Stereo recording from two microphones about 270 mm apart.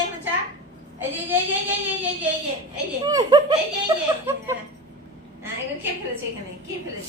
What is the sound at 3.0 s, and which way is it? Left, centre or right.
A child's voice, centre.